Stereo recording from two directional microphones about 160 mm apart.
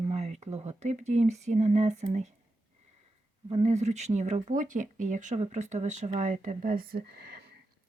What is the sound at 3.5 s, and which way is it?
Speech, 45° right (ahead or behind).